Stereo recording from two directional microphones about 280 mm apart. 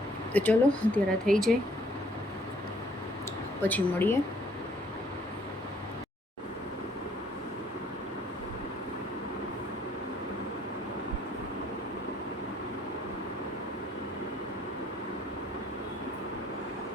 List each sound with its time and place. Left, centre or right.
0.3 s speech: centre
3.6 s a woman's voice: centre